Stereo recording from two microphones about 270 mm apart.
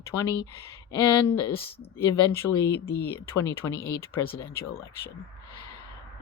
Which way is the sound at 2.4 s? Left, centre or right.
Centre.